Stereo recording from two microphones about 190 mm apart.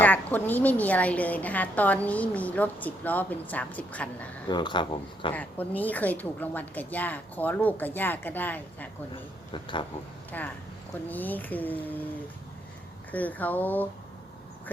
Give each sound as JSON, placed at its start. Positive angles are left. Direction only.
{"t": 0.0, "sound": "a woman's voice", "side_deg": 10}
{"t": 4.4, "sound": "speech", "side_deg": 25}
{"t": 5.3, "sound": "a woman's voice", "side_deg": 10}
{"t": 9.5, "sound": "speech", "side_deg": 25}
{"t": 10.3, "sound": "a woman's voice", "side_deg": 10}
{"t": 13.1, "sound": "a woman's voice", "side_deg": 10}